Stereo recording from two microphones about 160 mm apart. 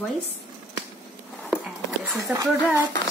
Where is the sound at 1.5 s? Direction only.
5° right (ahead or behind).